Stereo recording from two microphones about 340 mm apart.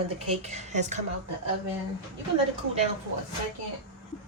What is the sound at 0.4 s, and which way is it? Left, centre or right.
Speech, centre.